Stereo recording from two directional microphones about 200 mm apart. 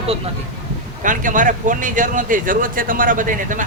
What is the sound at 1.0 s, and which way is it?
Speech, 40° right (ahead or behind).